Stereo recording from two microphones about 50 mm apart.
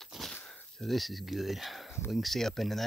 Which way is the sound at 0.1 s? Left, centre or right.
Centre.